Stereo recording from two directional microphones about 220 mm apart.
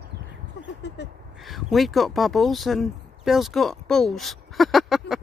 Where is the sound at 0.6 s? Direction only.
50° left (ahead or behind).